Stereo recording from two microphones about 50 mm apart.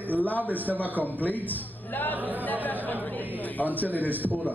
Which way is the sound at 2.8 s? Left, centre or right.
Left.